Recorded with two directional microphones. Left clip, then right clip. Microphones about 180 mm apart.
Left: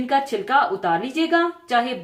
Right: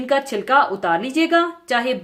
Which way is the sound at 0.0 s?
55° right (ahead or behind).